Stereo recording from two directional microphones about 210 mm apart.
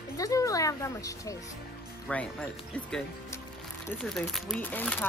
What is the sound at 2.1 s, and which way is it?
Speech, 5° left (ahead or behind).